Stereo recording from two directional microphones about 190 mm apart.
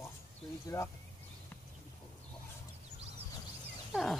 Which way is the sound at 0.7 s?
20° left (ahead or behind).